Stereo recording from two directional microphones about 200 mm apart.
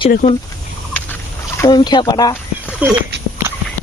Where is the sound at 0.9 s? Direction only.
10° left (ahead or behind).